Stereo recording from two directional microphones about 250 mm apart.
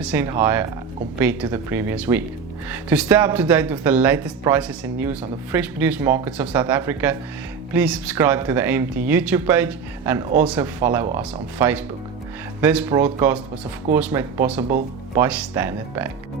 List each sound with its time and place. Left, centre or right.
0.0 s speech: centre
14.7 s speech: right
15.2 s speech: centre